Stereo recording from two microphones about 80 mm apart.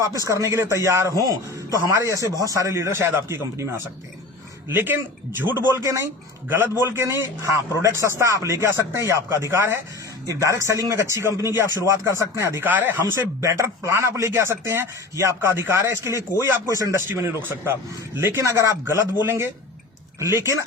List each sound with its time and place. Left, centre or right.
0.3 s a man's voice: right
6.8 s a man's voice: right
10.2 s a man's voice: right
12.6 s speech: right
13.4 s a man's voice: right
17.1 s a man's voice: right